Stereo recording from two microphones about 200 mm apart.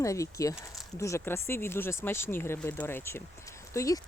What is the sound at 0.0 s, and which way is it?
Speech, 15° left (ahead or behind).